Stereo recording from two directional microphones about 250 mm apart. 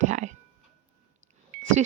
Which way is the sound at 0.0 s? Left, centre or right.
Right.